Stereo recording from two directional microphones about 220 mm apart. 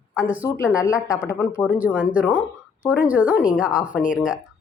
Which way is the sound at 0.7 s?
15° left (ahead or behind).